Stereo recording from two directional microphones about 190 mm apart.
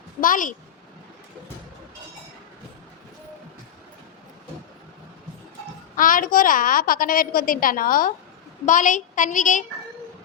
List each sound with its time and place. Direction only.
0.2 s a woman's voice: 45° left (ahead or behind)
6.0 s a woman's voice: 45° left (ahead or behind)